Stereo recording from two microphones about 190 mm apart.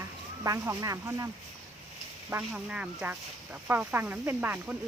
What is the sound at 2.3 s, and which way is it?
Speech, 5° right (ahead or behind).